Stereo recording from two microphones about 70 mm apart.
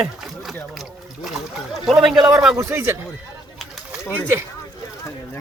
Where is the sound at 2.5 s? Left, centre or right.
Right.